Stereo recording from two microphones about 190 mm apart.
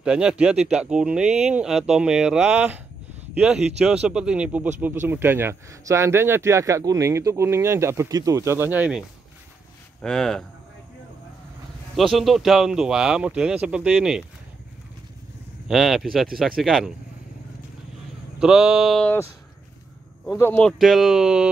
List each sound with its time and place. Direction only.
0.0 s speech: 5° right (ahead or behind)
10.0 s speech: centre (ahead or behind)
12.0 s speech: centre (ahead or behind)
15.7 s speech: centre (ahead or behind)
18.4 s speech: 5° right (ahead or behind)
20.3 s speech: 10° left (ahead or behind)